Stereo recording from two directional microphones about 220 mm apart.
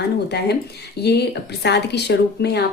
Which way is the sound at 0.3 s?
50° left (ahead or behind).